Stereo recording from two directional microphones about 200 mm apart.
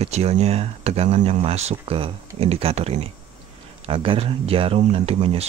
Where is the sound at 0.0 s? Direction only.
30° right (ahead or behind).